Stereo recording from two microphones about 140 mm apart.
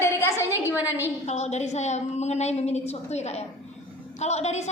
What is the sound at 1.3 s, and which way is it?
A woman's voice, 55° left (ahead or behind).